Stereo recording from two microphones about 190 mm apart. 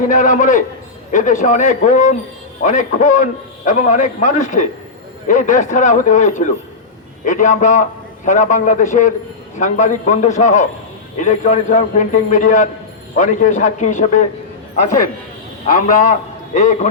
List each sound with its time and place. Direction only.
0.1 s a man's voice: 40° left (ahead or behind)
15.6 s a man's voice: 45° left (ahead or behind)